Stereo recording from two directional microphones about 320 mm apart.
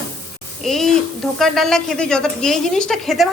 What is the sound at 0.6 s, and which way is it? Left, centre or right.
A woman's voice, centre.